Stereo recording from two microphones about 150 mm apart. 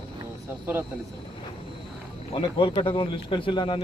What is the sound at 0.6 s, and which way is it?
Speech, 15° right (ahead or behind).